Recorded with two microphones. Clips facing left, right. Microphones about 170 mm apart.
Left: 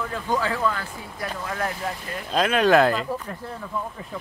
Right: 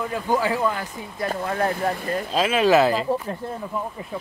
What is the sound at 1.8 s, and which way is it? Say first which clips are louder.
Speech: right 7 dB; 50° right (ahead or behind).